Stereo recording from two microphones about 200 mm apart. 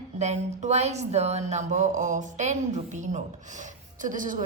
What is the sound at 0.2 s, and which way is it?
A woman's voice, 35° right (ahead or behind).